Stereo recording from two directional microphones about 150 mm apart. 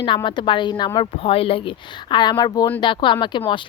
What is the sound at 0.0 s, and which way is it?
A woman's voice, 35° left (ahead or behind).